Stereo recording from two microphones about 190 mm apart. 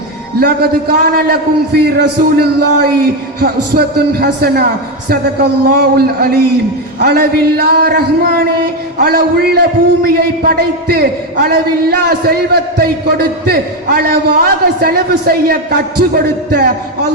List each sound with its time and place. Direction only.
0.3 s a man's voice: 55° right (ahead or behind)